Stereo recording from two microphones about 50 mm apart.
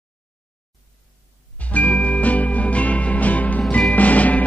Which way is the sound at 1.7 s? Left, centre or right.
Left.